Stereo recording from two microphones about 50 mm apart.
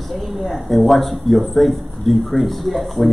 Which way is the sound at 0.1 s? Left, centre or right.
Centre.